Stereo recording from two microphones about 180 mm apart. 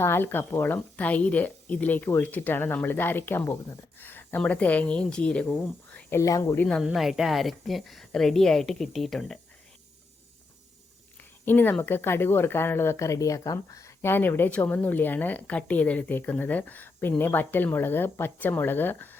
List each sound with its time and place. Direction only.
0.0 s speech: 15° left (ahead or behind)
6.7 s a woman's voice: centre (ahead or behind)
11.2 s speech: 10° left (ahead or behind)